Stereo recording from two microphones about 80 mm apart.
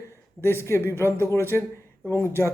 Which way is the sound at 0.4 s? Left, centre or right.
Left.